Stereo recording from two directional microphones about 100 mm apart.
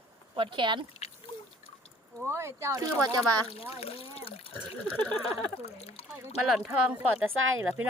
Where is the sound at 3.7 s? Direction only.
85° left.